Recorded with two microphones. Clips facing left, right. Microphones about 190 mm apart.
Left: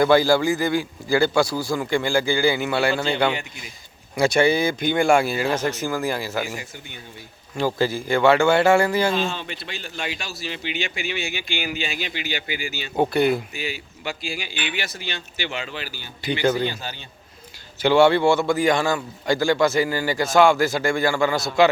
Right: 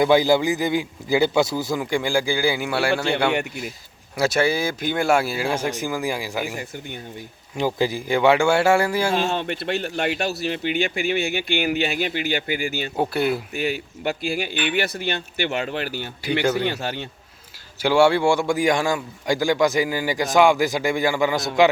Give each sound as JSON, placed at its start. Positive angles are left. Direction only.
{"t": 0.0, "sound": "a man's voice", "side_deg": -15}
{"t": 4.2, "sound": "a man's voice", "side_deg": -5}
{"t": 9.1, "sound": "speech", "side_deg": -60}
{"t": 13.0, "sound": "speech", "side_deg": -5}
{"t": 13.5, "sound": "a man's voice", "side_deg": -55}
{"t": 17.8, "sound": "a man's voice", "side_deg": -10}